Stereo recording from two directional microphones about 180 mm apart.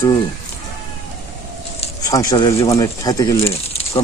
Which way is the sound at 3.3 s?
35° left (ahead or behind).